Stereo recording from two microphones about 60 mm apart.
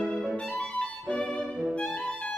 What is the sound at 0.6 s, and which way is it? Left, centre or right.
Music, left.